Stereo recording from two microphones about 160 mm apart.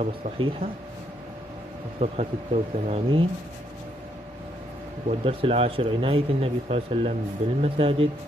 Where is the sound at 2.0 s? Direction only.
40° right (ahead or behind).